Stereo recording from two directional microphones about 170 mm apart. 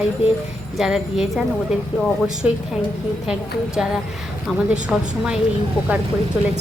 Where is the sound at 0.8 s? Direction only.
Centre (ahead or behind).